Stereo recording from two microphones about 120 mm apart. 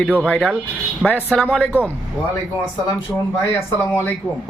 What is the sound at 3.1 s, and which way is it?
Speech, centre (ahead or behind).